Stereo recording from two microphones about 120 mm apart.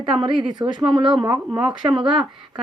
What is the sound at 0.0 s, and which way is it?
A woman's voice, 45° right (ahead or behind).